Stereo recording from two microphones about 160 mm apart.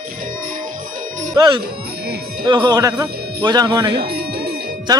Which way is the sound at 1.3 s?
25° right (ahead or behind).